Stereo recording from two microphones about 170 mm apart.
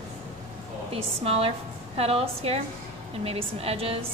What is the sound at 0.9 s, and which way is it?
A woman's voice, 35° right (ahead or behind).